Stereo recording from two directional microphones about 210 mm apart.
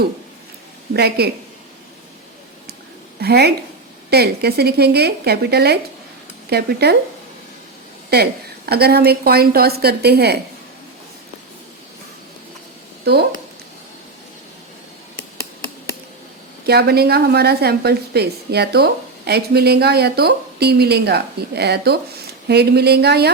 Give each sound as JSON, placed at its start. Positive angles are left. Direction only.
{"t": 0.9, "sound": "a woman's voice", "side_deg": -50}
{"t": 3.2, "sound": "a woman's voice", "side_deg": -50}
{"t": 8.1, "sound": "a woman's voice", "side_deg": -50}
{"t": 13.1, "sound": "a woman's voice", "side_deg": -50}
{"t": 16.6, "sound": "a woman's voice", "side_deg": -50}